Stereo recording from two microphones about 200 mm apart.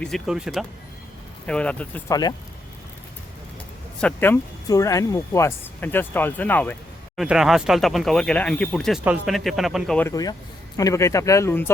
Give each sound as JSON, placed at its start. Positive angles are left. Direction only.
{"t": 0.0, "sound": "speech", "side_deg": 0}
{"t": 4.0, "sound": "speech", "side_deg": 10}
{"t": 7.2, "sound": "speech", "side_deg": 0}
{"t": 10.1, "sound": "speech", "side_deg": 20}